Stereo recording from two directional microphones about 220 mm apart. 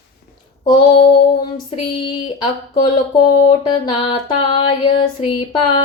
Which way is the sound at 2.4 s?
20° left (ahead or behind).